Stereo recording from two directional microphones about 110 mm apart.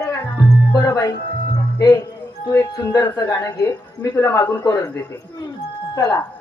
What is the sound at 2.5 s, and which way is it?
A man's voice, 30° left (ahead or behind).